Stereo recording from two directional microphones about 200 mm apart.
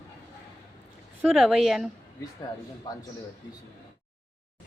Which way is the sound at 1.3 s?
Centre (ahead or behind).